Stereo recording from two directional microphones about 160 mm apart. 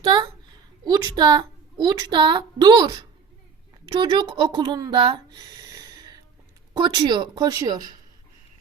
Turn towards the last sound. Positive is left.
turn(degrees=-25)  # may be behind; listen again after turning